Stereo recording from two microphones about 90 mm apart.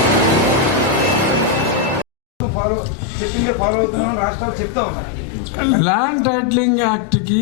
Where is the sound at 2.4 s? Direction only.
20° left (ahead or behind).